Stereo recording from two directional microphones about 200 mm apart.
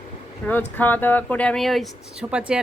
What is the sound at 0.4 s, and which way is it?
Speech, 10° left (ahead or behind).